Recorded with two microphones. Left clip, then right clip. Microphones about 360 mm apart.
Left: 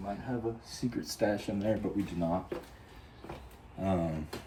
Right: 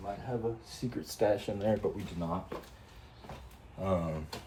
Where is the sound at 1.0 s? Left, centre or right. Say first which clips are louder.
Right 2 dB; right.